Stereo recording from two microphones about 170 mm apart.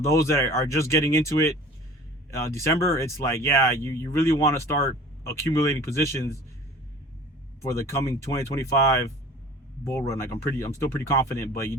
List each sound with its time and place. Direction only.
0.1 s speech: 15° left (ahead or behind)
7.6 s speech: 15° left (ahead or behind)